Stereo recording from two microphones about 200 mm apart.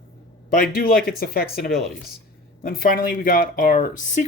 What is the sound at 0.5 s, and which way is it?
Speech, 45° left (ahead or behind).